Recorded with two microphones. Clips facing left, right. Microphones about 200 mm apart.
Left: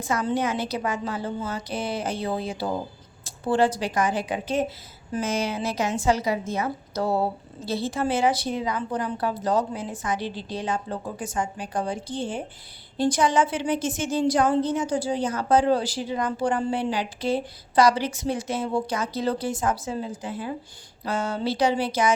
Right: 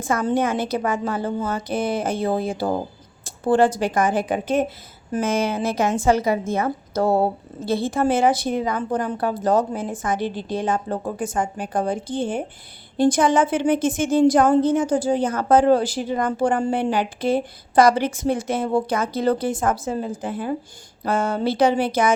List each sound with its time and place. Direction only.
0.0 s a woman's voice: 50° right (ahead or behind)